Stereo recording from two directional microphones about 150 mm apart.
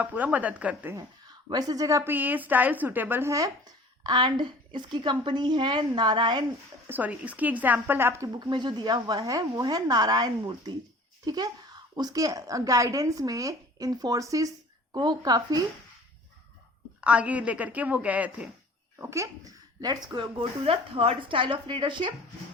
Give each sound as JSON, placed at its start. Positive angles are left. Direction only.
{"t": 0.0, "sound": "a woman's voice", "side_deg": -10}
{"t": 1.5, "sound": "a woman's voice", "side_deg": -25}
{"t": 6.8, "sound": "a woman's voice", "side_deg": -10}
{"t": 17.0, "sound": "a woman's voice", "side_deg": -10}
{"t": 18.9, "sound": "a woman's voice", "side_deg": -20}
{"t": 20.4, "sound": "speech", "side_deg": -40}